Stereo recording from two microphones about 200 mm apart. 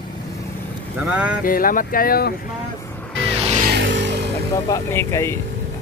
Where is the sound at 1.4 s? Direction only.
45° left (ahead or behind).